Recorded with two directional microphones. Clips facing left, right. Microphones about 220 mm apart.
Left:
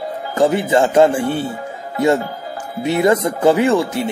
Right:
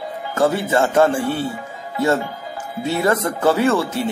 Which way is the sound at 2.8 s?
15° left (ahead or behind).